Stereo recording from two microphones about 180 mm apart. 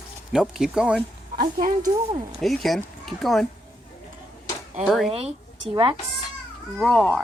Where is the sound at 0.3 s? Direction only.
5° right (ahead or behind).